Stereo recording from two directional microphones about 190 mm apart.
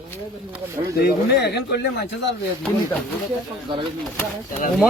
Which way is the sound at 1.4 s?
60° left (ahead or behind).